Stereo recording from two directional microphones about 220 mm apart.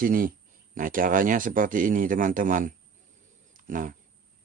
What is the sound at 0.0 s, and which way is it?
Speech, 40° right (ahead or behind).